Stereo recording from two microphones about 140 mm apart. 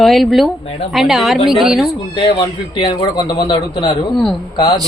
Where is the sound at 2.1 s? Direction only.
35° left (ahead or behind).